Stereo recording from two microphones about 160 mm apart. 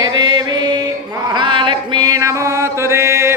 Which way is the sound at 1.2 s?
30° right (ahead or behind).